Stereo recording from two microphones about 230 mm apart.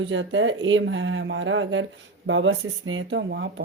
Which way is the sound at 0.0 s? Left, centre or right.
Right.